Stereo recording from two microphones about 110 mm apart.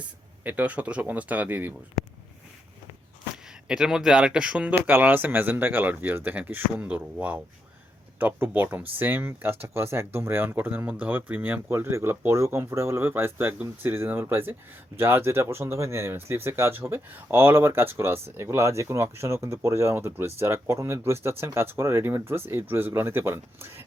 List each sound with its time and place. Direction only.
0.4 s speech: 15° right (ahead or behind)
3.7 s speech: 5° right (ahead or behind); by 23.8 s 20° right (ahead or behind)